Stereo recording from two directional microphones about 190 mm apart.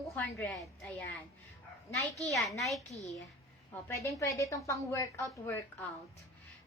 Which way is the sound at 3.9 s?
15° left (ahead or behind).